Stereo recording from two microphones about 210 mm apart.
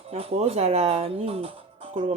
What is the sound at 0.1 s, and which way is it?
Speech, 30° right (ahead or behind).